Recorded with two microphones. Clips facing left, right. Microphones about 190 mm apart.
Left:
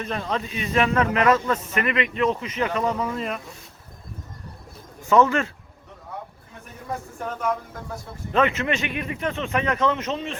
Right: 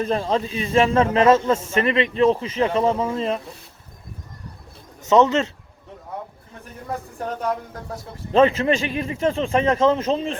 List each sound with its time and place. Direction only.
0.0 s a man's voice: 30° right (ahead or behind)
5.0 s a man's voice: 20° right (ahead or behind)
7.2 s a man's voice: 35° right (ahead or behind)